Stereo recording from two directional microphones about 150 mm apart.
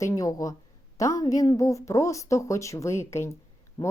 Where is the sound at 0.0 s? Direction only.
20° left (ahead or behind).